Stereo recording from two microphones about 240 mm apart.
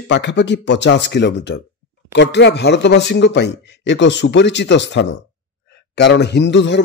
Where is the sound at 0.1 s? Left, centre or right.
Left.